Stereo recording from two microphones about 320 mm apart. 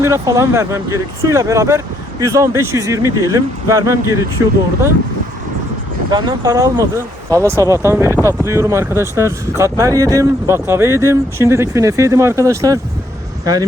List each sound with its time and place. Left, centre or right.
0.0 s speech: centre
6.1 s speech: centre